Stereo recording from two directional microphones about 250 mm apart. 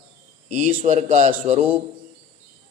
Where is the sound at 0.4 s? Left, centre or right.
Right.